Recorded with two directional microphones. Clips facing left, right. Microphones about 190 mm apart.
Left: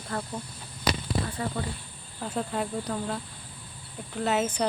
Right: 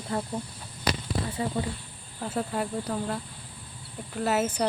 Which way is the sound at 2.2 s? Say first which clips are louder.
Right 1 dB; 5° right (ahead or behind).